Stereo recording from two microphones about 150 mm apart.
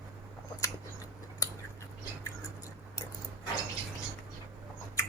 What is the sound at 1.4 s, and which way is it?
Scissors, 20° left (ahead or behind).